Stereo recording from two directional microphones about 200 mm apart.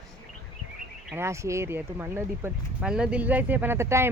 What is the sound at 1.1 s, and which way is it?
Speech, 15° right (ahead or behind).